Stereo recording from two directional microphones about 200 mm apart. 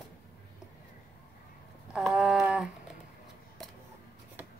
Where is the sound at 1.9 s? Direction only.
Centre (ahead or behind).